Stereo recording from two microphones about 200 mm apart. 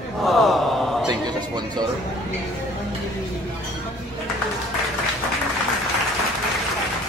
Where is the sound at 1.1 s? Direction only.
20° right (ahead or behind).